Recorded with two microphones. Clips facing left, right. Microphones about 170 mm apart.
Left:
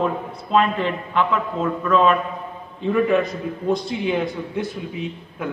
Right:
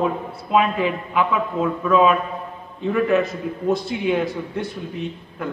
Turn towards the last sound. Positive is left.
turn(degrees=0)  # may be behind; listen again after turning